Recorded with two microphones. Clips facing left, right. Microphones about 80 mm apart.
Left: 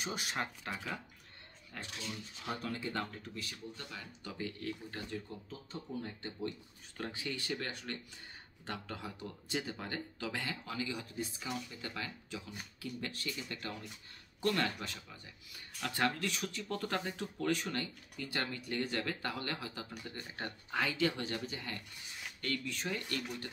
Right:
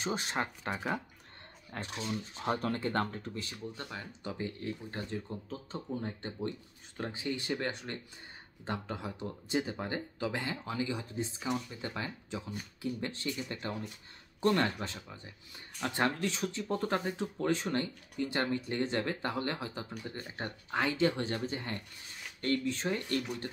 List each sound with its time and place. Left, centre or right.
0.0 s speech: right
3.3 s speech: right
5.5 s speech: right
7.0 s speech: right